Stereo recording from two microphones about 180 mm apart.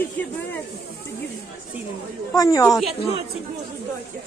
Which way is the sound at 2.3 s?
20° left (ahead or behind).